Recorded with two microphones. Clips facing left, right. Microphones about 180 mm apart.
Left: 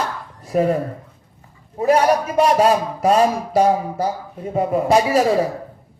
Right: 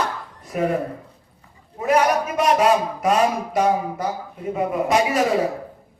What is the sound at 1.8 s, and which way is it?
A man's voice, 30° left (ahead or behind).